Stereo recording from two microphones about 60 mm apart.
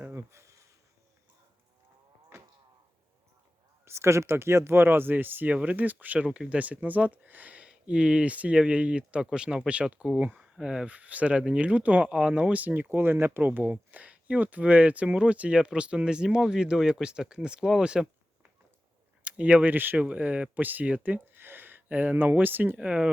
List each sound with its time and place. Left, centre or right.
0.0 s a sound: right
2.3 s a sound: right
3.8 s speech: right
6.2 s speech: centre
10.6 s speech: centre
10.8 s speech: right
22.8 s speech: centre